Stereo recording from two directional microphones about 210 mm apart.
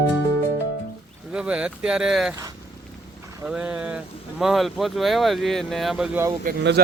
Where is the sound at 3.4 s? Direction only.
5° right (ahead or behind).